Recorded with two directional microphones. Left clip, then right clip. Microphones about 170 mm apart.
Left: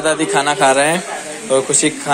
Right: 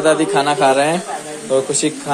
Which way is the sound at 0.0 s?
5° right (ahead or behind).